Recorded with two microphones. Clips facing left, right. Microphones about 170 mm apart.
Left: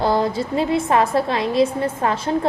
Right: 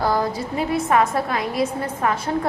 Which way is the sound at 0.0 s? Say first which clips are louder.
Left 3 dB; 25° left (ahead or behind).